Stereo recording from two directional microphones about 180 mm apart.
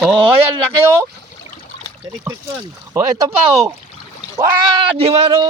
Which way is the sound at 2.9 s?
15° right (ahead or behind).